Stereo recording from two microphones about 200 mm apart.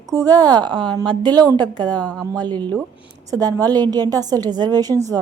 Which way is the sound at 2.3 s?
20° right (ahead or behind).